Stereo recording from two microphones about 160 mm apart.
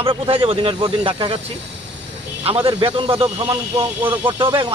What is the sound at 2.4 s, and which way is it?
Speech, 35° right (ahead or behind).